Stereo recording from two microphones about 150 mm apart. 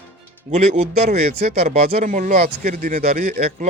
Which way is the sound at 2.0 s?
55° right (ahead or behind).